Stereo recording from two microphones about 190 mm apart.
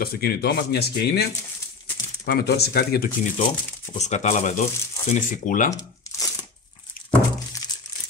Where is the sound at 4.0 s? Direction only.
35° left (ahead or behind).